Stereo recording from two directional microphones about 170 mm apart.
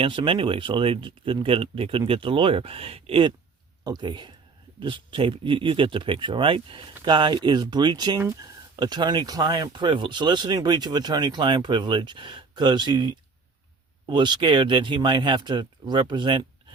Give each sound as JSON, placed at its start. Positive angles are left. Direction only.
{"t": 0.0, "sound": "speech", "side_deg": -30}
{"t": 14.1, "sound": "speech", "side_deg": -25}